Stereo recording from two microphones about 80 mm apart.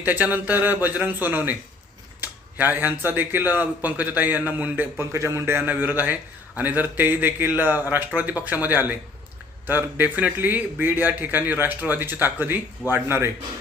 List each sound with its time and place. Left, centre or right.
0.0 s a man's voice: right
4.9 s a man's voice: right